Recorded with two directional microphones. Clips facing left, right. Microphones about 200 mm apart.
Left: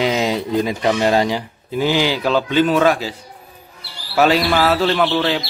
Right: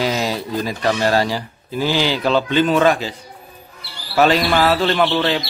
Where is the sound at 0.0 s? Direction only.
20° left (ahead or behind).